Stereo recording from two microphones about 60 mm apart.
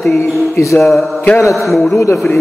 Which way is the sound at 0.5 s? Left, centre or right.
Left.